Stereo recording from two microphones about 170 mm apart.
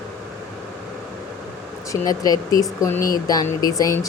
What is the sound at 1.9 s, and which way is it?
Speech, 20° left (ahead or behind).